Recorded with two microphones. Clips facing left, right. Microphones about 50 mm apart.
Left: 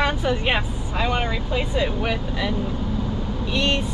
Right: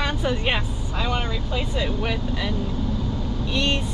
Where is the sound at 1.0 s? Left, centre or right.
Centre.